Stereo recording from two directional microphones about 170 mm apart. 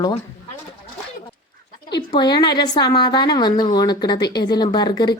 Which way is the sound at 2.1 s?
25° left (ahead or behind).